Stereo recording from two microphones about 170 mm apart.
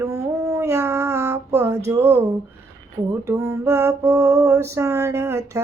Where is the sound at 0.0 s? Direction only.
20° right (ahead or behind).